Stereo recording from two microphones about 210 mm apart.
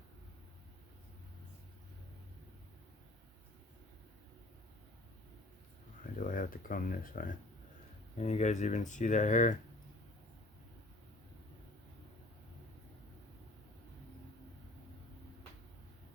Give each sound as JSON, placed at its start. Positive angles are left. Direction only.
{"t": 6.1, "sound": "speech", "side_deg": 40}